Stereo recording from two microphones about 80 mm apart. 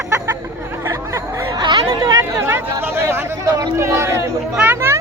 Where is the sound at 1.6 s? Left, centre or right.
Right.